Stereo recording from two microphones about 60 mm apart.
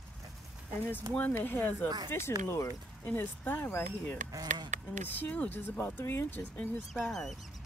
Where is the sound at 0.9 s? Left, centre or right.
Left.